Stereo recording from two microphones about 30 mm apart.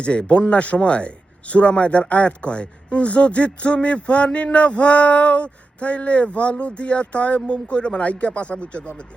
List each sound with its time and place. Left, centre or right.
0.0 s speech: left
7.4 s speech: left